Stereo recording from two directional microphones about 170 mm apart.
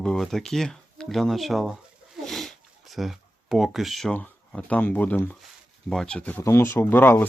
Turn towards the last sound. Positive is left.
turn(degrees=10)  # may be behind; listen again after turning